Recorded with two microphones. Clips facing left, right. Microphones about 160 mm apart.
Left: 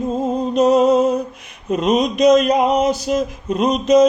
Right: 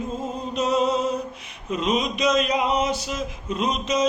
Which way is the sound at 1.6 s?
45° left (ahead or behind).